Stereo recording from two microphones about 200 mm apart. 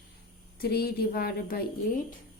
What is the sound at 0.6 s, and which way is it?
Speech, 50° left (ahead or behind).